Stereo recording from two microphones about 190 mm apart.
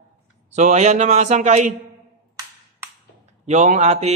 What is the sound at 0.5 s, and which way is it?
A man's voice, 40° right (ahead or behind).